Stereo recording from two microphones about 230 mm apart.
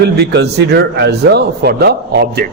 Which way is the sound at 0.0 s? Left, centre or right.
Right.